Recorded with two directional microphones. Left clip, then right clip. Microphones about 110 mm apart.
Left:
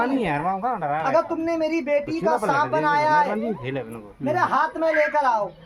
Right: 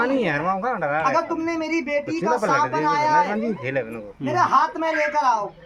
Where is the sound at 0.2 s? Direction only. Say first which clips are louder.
Right 1 dB; 35° left (ahead or behind).